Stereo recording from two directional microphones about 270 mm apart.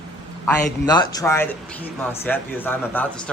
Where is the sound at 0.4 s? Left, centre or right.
Centre.